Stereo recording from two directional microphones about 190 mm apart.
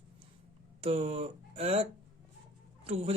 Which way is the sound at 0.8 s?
30° right (ahead or behind).